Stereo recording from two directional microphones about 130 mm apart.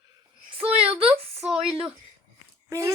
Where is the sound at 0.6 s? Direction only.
50° right (ahead or behind).